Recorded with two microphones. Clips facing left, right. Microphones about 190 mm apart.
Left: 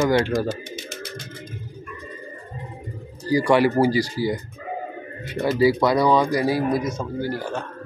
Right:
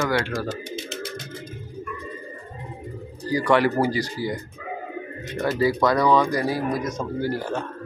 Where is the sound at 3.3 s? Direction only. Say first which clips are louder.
Left 2 dB; 10° left (ahead or behind).